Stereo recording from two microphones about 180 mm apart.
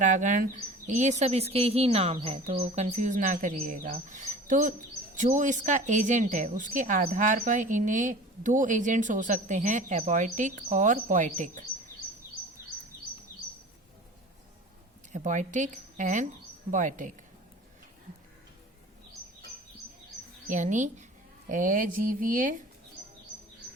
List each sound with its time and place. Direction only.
0.0 s a woman's voice: 45° right (ahead or behind)
15.1 s a woman's voice: 40° right (ahead or behind)
20.5 s a woman's voice: 45° right (ahead or behind)